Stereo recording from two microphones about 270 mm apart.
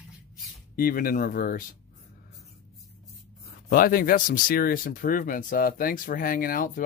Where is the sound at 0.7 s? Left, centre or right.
Left.